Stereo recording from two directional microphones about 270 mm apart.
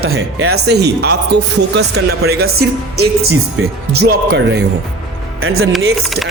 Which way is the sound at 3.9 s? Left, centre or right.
Right.